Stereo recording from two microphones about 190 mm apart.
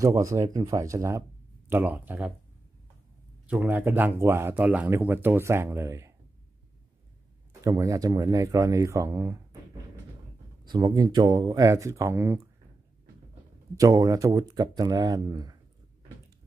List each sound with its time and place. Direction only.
0.0 s speech: 15° right (ahead or behind)
3.4 s speech: 10° right (ahead or behind)
7.6 s speech: 15° right (ahead or behind)
10.6 s speech: 20° right (ahead or behind)
13.7 s speech: 15° right (ahead or behind)